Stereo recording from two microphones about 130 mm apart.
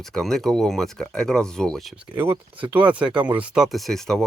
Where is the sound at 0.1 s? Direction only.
5° left (ahead or behind).